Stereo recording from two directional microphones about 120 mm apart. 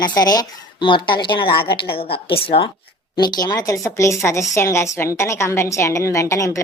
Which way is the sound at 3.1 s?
35° left (ahead or behind).